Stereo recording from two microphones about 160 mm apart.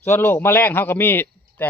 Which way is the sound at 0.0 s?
15° left (ahead or behind).